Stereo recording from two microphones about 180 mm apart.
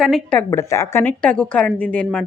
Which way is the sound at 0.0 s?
5° left (ahead or behind).